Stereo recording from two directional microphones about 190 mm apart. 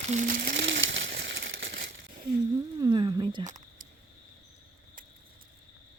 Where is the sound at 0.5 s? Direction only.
70° right (ahead or behind).